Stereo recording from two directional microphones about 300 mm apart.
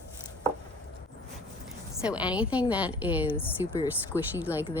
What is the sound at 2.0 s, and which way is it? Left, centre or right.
A woman's voice, centre.